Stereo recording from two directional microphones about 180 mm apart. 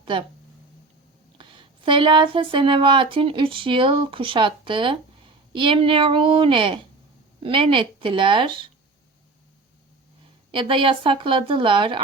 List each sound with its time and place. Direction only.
0.0 s speech: 25° right (ahead or behind)
1.4 s speech: 25° right (ahead or behind)
10.5 s speech: 30° right (ahead or behind)